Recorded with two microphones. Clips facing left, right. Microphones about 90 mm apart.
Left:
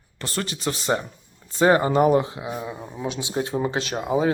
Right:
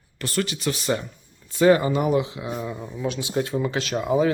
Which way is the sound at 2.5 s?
20° left (ahead or behind).